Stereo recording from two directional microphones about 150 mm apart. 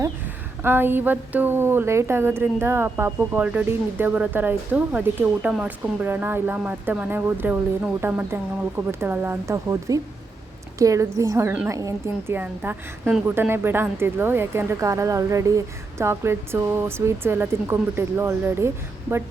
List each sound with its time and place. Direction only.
0.6 s a woman's voice: 15° right (ahead or behind)